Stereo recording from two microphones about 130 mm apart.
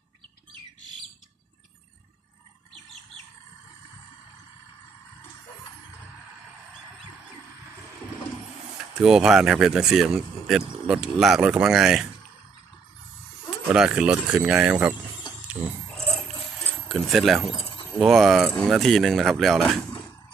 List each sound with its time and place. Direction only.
9.0 s speech: 5° right (ahead or behind)
13.7 s speech: 5° right (ahead or behind)
16.9 s speech: centre (ahead or behind)